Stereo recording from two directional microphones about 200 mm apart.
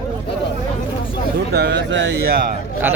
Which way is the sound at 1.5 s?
55° right (ahead or behind).